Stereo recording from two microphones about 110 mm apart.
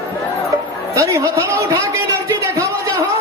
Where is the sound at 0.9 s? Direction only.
25° right (ahead or behind).